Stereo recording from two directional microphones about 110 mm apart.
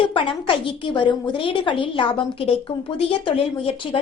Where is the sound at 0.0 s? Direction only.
50° left (ahead or behind).